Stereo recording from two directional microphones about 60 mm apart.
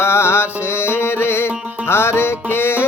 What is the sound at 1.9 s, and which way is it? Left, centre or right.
Music, left.